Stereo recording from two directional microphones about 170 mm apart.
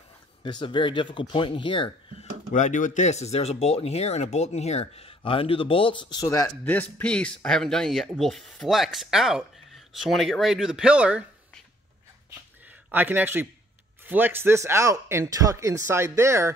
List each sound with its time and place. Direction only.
0.4 s speech: 25° left (ahead or behind)
2.5 s speech: 50° left (ahead or behind); by 6.5 s 20° left (ahead or behind)
6.6 s speech: 10° left (ahead or behind); by 11.2 s 5° right (ahead or behind)
12.9 s speech: 10° right (ahead or behind)